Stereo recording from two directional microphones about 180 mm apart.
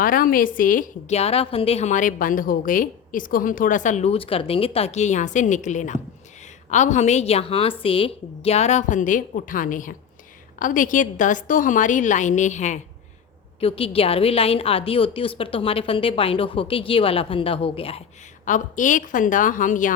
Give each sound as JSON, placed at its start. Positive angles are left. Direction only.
{"t": 0.0, "sound": "a woman's voice", "side_deg": 50}
{"t": 18.4, "sound": "a woman's voice", "side_deg": 45}